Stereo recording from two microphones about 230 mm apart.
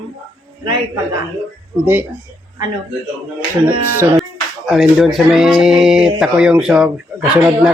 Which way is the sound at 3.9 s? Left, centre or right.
Centre.